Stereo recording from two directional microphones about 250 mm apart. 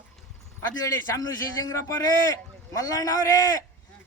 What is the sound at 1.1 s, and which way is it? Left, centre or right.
A man's voice, centre.